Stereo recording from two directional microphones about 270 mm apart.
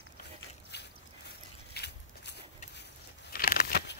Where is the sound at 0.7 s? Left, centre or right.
Left.